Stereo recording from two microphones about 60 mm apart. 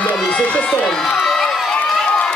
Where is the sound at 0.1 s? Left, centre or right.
Centre.